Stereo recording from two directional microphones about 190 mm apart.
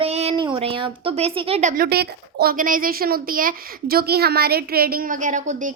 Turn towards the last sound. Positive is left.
turn(degrees=-40)  # may be behind; listen again after turning